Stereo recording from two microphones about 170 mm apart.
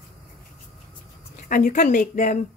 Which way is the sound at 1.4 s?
50° left (ahead or behind).